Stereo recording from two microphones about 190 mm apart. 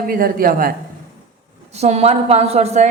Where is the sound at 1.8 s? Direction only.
35° right (ahead or behind).